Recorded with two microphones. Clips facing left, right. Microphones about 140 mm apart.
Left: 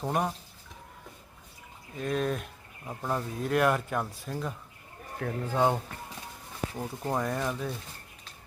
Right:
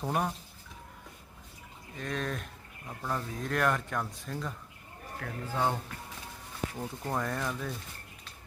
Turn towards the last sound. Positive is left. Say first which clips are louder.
# left 3 dB
turn(degrees=15)  # may be behind; listen again after turning